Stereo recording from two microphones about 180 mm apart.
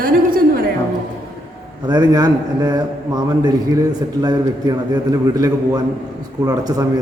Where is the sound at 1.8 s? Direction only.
25° right (ahead or behind).